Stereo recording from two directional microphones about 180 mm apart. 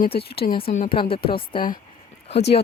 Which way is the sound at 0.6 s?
35° left (ahead or behind).